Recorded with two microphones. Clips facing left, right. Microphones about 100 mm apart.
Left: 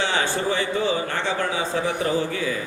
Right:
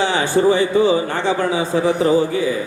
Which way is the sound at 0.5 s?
15° right (ahead or behind).